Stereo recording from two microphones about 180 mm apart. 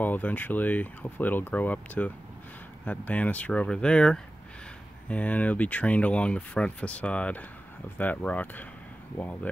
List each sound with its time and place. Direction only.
0.0 s speech: 10° left (ahead or behind)